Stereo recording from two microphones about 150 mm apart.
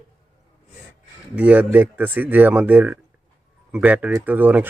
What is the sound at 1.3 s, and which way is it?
Speech, 10° right (ahead or behind).